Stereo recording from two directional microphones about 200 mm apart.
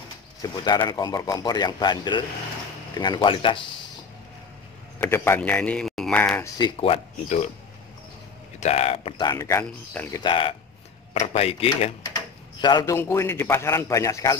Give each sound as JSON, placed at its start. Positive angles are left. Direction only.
{"t": 0.4, "sound": "a man's voice", "side_deg": 20}
{"t": 5.0, "sound": "a man's voice", "side_deg": 10}
{"t": 6.6, "sound": "a man's voice", "side_deg": 30}
{"t": 8.5, "sound": "a man's voice", "side_deg": 30}
{"t": 10.2, "sound": "a man's voice", "side_deg": 25}